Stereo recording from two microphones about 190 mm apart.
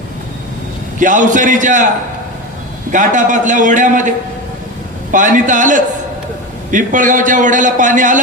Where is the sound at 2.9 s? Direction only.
40° right (ahead or behind).